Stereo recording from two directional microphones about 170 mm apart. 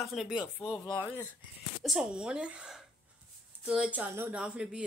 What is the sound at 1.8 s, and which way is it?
Speech, centre (ahead or behind).